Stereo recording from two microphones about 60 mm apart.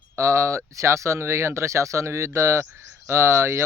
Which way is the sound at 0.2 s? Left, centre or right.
Right.